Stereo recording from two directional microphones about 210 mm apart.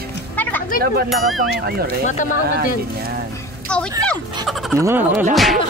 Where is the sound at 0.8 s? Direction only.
45° right (ahead or behind).